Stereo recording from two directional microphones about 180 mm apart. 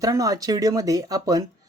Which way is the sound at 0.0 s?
20° right (ahead or behind).